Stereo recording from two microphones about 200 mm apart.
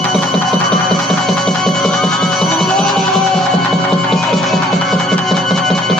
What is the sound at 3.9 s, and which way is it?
Music, centre (ahead or behind).